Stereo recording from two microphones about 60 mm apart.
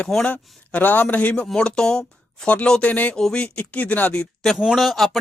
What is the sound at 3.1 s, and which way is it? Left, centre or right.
Speech, centre.